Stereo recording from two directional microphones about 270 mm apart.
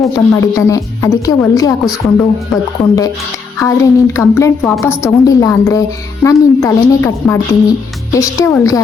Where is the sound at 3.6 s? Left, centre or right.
Centre.